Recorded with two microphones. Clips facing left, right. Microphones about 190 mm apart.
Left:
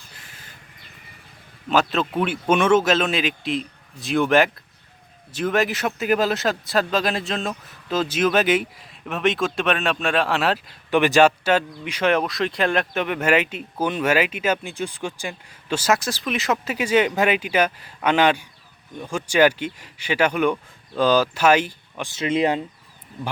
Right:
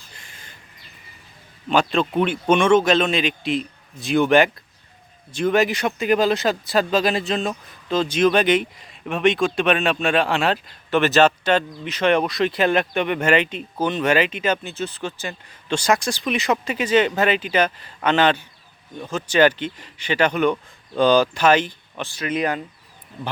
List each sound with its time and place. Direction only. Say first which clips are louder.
0.1 s bird: right 2 dB; 5° left (ahead or behind)
1.7 s speech: right 2 dB; 5° left (ahead or behind)
10.9 s speech: even; 15° left (ahead or behind)
22.1 s speech: left 3 dB; 25° left (ahead or behind)